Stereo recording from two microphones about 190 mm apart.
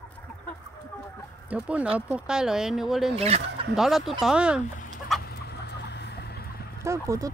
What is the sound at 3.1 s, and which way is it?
Speech, 30° right (ahead or behind).